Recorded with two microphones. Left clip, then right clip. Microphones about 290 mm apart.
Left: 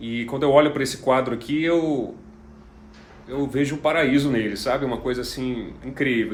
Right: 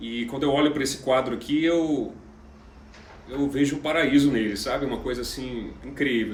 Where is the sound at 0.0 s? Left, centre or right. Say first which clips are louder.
Left 4 dB; centre.